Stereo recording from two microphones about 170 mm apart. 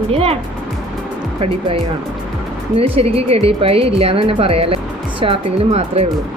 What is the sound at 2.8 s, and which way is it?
Speech, 35° right (ahead or behind).